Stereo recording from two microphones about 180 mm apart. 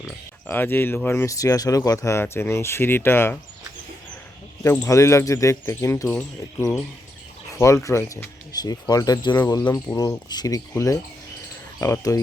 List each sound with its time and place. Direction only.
0.5 s speech: 10° left (ahead or behind)
4.6 s speech: 15° left (ahead or behind)
7.6 s speech: 15° left (ahead or behind)